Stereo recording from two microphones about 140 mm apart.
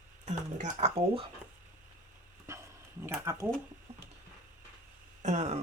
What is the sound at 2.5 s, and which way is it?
Dog, 20° right (ahead or behind).